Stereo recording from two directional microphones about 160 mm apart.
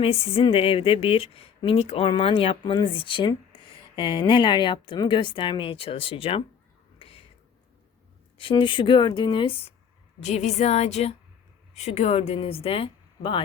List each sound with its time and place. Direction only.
0.0 s speech: 35° left (ahead or behind)
7.0 s whispering: 35° left (ahead or behind)
8.4 s speech: 30° left (ahead or behind)
10.2 s a woman's voice: 45° left (ahead or behind)